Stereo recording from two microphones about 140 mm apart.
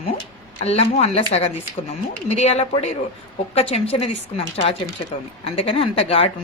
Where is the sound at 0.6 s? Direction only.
50° left (ahead or behind).